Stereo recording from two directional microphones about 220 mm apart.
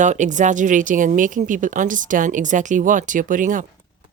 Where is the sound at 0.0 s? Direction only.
35° right (ahead or behind).